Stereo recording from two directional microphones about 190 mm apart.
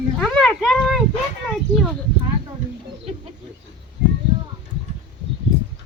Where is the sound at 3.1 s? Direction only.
35° right (ahead or behind).